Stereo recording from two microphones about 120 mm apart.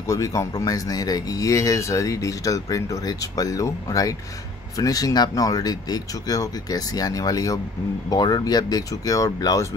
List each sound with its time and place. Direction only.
0.1 s speech: 25° left (ahead or behind)